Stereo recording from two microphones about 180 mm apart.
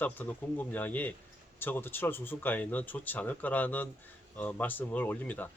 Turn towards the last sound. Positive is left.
turn(degrees=10)  # may be behind; listen again after turning